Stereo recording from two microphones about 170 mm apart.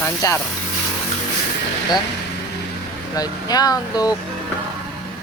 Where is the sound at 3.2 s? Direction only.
25° left (ahead or behind).